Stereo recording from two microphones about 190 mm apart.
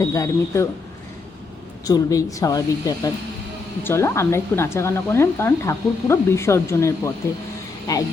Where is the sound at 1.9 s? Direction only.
15° left (ahead or behind).